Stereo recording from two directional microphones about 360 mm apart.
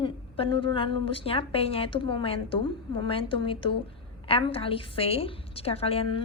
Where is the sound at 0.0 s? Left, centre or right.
Centre.